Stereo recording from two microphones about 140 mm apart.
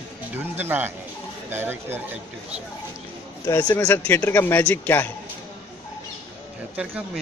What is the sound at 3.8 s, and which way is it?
Speech, 10° left (ahead or behind).